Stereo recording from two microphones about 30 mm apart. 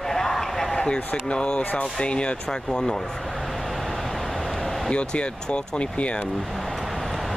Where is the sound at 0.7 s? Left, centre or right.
Left.